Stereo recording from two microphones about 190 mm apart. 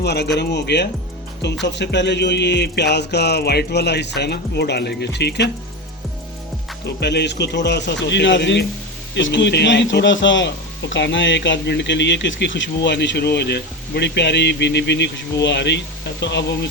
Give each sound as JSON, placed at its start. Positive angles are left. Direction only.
{"t": 0.0, "sound": "music", "side_deg": 60}
{"t": 6.8, "sound": "music", "side_deg": 65}
{"t": 9.1, "sound": "a man's voice", "side_deg": 70}